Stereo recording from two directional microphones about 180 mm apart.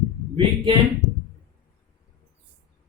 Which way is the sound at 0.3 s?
25° right (ahead or behind).